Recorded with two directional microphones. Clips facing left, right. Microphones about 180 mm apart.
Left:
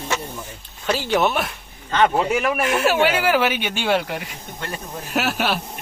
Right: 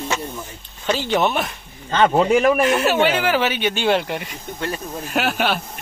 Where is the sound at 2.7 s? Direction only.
5° left (ahead or behind).